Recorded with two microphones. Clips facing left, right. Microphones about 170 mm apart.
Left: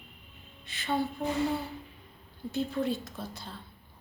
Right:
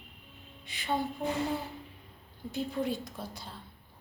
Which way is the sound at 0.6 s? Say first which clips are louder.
Left 1 dB; 15° right (ahead or behind).